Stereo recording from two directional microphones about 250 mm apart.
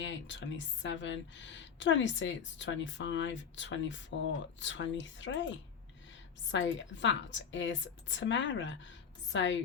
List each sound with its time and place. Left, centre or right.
0.0 s speech: left
6.5 s speech: left